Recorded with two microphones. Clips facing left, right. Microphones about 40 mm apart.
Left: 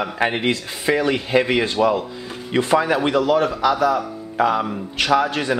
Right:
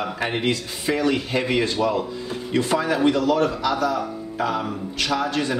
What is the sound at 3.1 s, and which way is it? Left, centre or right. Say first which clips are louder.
Speech: left 2 dB; centre.